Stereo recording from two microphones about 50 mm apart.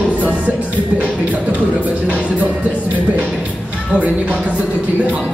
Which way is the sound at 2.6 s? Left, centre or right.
Right.